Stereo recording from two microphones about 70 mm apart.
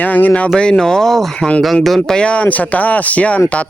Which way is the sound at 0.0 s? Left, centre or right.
Left.